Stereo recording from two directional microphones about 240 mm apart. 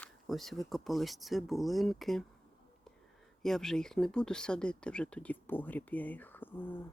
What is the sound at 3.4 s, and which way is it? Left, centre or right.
Speech, centre.